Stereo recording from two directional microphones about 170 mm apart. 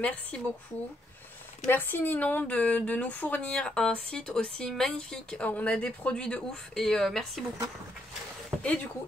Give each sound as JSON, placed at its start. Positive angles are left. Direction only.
{"t": 0.0, "sound": "speech", "side_deg": 5}
{"t": 1.6, "sound": "a woman's voice", "side_deg": 10}
{"t": 8.5, "sound": "a sound", "side_deg": 5}